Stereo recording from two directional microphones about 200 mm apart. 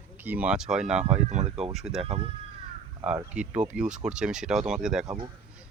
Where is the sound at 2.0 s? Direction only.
30° right (ahead or behind).